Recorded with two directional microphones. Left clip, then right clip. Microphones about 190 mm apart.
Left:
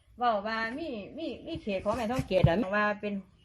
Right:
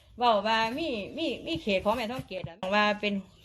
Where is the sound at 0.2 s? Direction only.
15° right (ahead or behind).